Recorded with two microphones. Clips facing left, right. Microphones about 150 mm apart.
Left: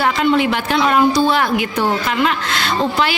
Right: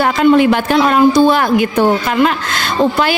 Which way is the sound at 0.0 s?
45° right (ahead or behind).